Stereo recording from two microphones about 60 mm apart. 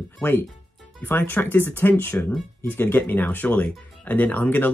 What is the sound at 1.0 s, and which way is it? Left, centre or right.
Speech, left.